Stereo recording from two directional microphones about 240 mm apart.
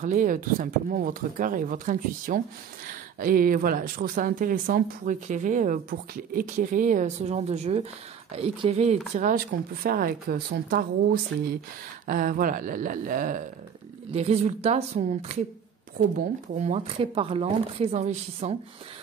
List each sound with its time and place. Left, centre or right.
0.0 s speech: right
16.5 s speech: right